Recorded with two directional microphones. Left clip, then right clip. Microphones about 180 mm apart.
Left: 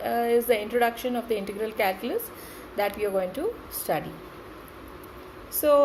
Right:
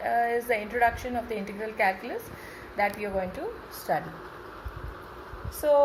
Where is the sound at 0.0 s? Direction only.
50° left (ahead or behind).